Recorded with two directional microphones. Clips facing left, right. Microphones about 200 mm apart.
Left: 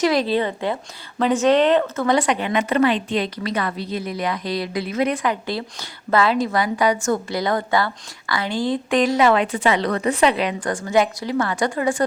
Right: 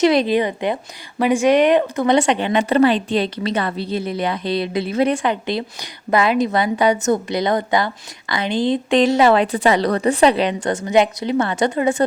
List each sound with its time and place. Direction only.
0.0 s a woman's voice: 20° right (ahead or behind)